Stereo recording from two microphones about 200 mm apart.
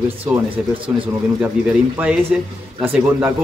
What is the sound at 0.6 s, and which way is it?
Speech, 5° right (ahead or behind).